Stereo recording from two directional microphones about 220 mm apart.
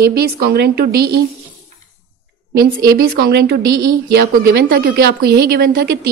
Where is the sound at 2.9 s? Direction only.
45° right (ahead or behind).